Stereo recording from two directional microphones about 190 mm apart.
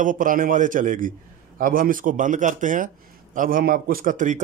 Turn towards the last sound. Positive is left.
turn(degrees=-40)  # may be behind; listen again after turning